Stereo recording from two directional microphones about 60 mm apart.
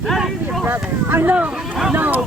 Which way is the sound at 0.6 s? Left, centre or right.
Right.